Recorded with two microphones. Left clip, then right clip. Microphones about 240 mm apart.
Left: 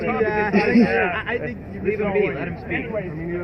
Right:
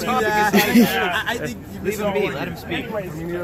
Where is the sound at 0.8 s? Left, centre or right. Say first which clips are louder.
Even; right.